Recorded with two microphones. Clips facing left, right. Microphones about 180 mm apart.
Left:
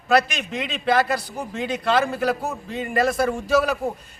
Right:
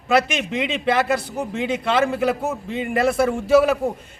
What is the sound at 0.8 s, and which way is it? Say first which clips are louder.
A man's voice: left 1 dB; 25° right (ahead or behind).